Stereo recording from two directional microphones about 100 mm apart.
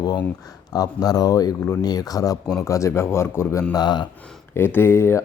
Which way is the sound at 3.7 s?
45° left (ahead or behind).